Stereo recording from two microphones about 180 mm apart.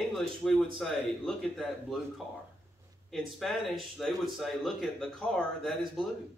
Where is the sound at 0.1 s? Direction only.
Centre (ahead or behind).